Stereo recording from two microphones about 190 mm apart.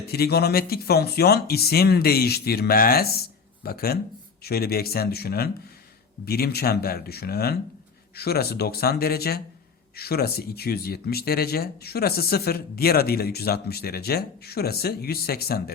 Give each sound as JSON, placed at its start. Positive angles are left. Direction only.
{"t": 0.1, "sound": "speech", "side_deg": 55}